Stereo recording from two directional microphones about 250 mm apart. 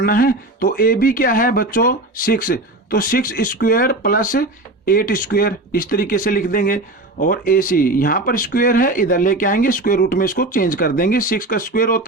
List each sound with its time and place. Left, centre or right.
0.0 s speech: left